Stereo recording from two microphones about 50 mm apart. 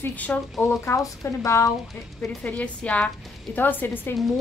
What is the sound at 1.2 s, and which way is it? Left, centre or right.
Speech, left.